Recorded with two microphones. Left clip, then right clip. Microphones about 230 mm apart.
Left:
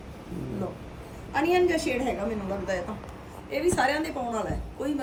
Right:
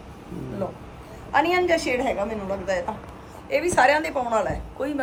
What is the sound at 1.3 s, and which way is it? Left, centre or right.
Speech, centre.